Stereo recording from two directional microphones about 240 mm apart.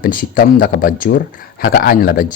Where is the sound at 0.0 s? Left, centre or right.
Left.